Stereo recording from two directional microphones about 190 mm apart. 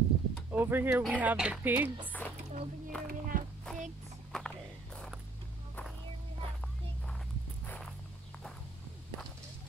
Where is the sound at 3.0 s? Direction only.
45° right (ahead or behind).